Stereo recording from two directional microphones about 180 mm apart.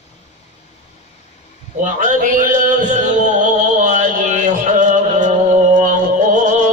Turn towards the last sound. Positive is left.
turn(degrees=-45)  # may be behind; listen again after turning